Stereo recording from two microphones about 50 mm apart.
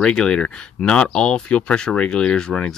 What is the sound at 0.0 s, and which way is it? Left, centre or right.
Speech, centre.